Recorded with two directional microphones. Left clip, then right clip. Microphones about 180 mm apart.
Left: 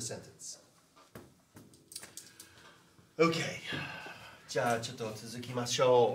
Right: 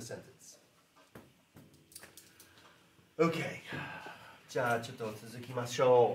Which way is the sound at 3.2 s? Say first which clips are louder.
Left 2 dB; 20° right (ahead or behind).